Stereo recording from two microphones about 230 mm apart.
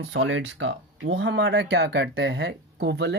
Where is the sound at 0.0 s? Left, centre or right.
Right.